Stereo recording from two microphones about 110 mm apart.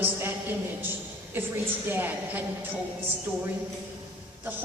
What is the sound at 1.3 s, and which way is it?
A woman's voice, 20° right (ahead or behind).